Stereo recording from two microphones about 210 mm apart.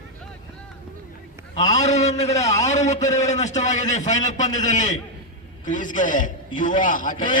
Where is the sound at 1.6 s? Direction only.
35° left (ahead or behind).